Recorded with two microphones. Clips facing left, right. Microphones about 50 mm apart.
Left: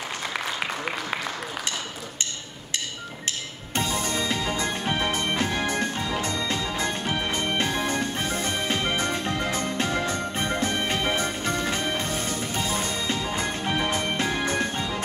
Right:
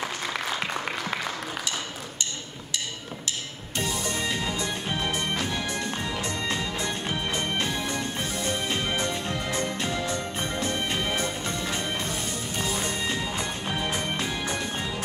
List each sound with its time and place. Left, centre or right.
0.3 s applause: centre
3.7 s music: left